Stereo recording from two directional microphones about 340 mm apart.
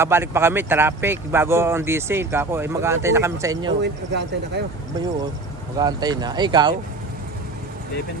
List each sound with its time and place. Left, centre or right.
0.0 s speech: centre
3.8 s speech: right
5.8 s speech: centre